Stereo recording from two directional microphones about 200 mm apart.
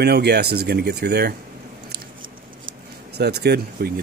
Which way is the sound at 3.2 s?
55° right (ahead or behind).